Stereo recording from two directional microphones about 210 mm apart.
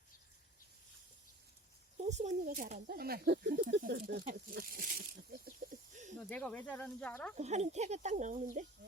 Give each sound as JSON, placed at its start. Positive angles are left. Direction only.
{"t": 2.0, "sound": "speech", "side_deg": -35}
{"t": 3.8, "sound": "speech", "side_deg": -45}
{"t": 6.1, "sound": "speech", "side_deg": 5}
{"t": 7.3, "sound": "speech", "side_deg": -35}